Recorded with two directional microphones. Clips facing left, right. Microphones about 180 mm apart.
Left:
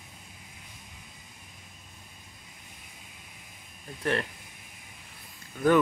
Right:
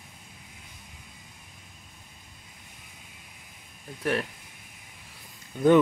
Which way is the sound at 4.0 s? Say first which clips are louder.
Right 1 dB; 5° right (ahead or behind).